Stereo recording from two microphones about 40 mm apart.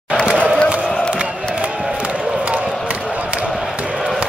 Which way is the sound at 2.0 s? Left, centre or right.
Right.